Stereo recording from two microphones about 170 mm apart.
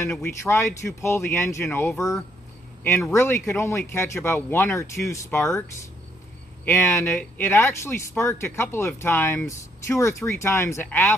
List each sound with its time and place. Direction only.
0.0 s speech: 15° left (ahead or behind)
6.6 s speech: 15° left (ahead or behind)